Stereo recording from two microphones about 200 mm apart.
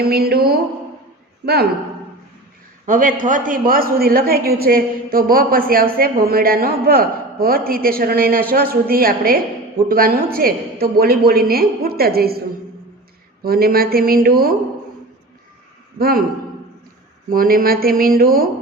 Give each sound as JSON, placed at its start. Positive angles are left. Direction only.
{"t": 0.0, "sound": "a woman's voice", "side_deg": -50}
{"t": 2.8, "sound": "a woman's voice", "side_deg": -40}
{"t": 13.4, "sound": "a woman's voice", "side_deg": -50}
{"t": 16.0, "sound": "a woman's voice", "side_deg": -50}
{"t": 17.2, "sound": "a woman's voice", "side_deg": -45}